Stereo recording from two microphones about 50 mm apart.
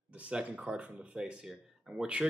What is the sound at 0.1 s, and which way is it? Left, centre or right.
Speech, right.